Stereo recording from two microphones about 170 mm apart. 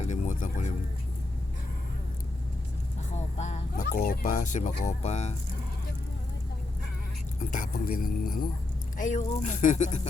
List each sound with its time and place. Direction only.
0.0 s music: 45° left (ahead or behind)
3.2 s a sound: 40° left (ahead or behind)
7.3 s speech: 50° left (ahead or behind)
7.7 s speech: 60° left (ahead or behind)
9.0 s speech: 50° left (ahead or behind)